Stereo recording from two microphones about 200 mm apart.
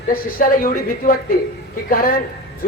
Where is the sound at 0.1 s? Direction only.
45° left (ahead or behind).